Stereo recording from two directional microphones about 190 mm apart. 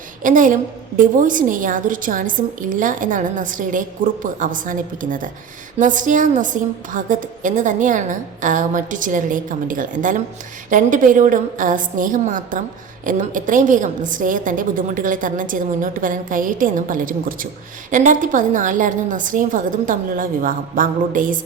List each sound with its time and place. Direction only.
0.2 s a woman's voice: 45° right (ahead or behind)